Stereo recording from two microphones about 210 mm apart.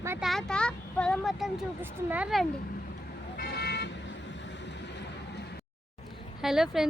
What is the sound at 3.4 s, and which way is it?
Vehicle, 50° left (ahead or behind).